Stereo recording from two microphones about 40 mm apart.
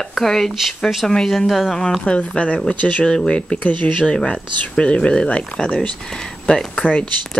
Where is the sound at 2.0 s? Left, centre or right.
Left.